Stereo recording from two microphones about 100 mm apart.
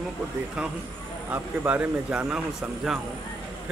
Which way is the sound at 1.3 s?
15° right (ahead or behind).